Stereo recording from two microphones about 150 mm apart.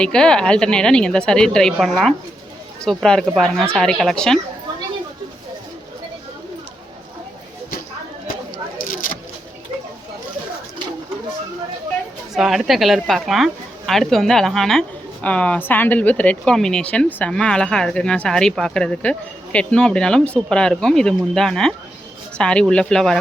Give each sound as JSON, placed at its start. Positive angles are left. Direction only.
{"t": 0.0, "sound": "speech", "side_deg": 5}
{"t": 8.8, "sound": "vehicle", "side_deg": 65}
{"t": 12.3, "sound": "speech", "side_deg": 0}